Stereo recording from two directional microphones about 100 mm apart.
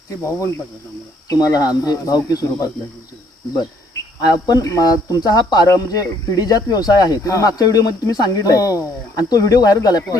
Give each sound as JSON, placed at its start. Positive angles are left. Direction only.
{"t": 0.1, "sound": "speech", "side_deg": 30}
{"t": 4.2, "sound": "speech", "side_deg": 40}